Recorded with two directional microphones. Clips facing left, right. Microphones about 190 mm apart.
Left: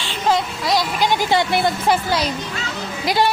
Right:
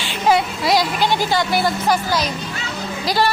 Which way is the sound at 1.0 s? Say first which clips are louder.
Left 1 dB; 15° left (ahead or behind).